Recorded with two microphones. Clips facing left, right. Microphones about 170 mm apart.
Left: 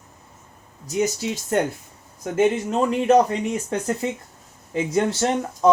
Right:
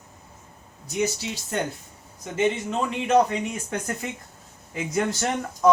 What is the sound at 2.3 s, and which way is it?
Speech, 40° left (ahead or behind).